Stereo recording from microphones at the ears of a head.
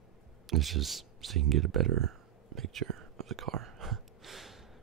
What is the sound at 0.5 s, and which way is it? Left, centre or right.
Speech, right.